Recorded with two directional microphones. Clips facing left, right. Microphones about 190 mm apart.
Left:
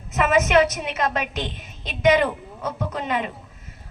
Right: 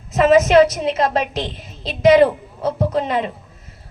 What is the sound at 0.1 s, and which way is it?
A woman's voice, 30° right (ahead or behind).